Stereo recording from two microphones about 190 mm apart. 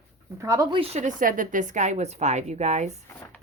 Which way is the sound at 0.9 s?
45° right (ahead or behind).